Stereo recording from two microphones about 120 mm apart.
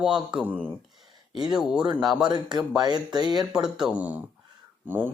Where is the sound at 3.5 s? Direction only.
5° right (ahead or behind).